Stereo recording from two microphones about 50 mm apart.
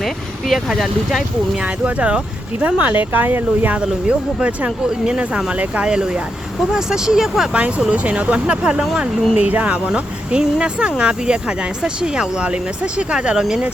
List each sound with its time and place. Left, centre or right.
0.0 s vehicle: centre
0.7 s speech: centre
1.6 s speech: right
4.0 s speech: centre
7.9 s speech: right
9.3 s speech: right; by 13.7 s centre